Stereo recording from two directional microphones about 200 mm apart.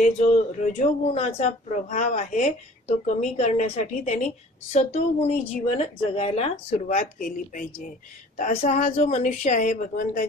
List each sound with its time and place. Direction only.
0.0 s speech: 40° left (ahead or behind)